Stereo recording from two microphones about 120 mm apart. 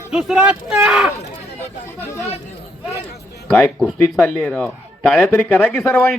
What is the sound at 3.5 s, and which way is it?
A man's voice, 15° left (ahead or behind).